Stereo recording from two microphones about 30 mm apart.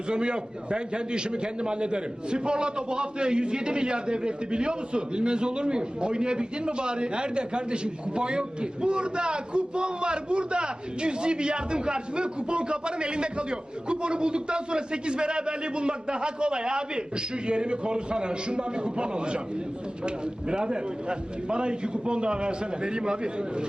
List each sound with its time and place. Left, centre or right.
0.1 s a man's voice: right